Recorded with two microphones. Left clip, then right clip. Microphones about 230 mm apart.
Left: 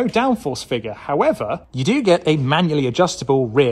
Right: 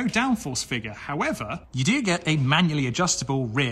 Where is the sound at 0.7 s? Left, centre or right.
Centre.